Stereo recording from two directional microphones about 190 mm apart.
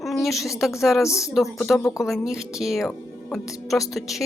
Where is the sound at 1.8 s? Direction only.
15° left (ahead or behind).